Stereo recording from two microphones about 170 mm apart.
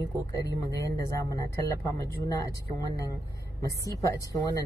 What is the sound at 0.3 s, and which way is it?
Speech, 20° left (ahead or behind).